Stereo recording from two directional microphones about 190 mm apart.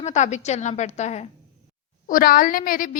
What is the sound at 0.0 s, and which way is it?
A woman's voice, 40° left (ahead or behind).